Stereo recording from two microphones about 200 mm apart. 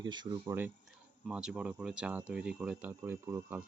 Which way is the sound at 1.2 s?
5° right (ahead or behind).